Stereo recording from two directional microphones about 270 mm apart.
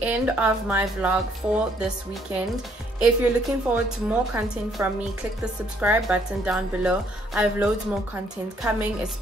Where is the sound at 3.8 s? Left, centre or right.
Centre.